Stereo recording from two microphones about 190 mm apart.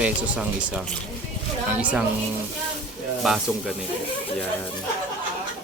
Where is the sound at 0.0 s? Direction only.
5° right (ahead or behind).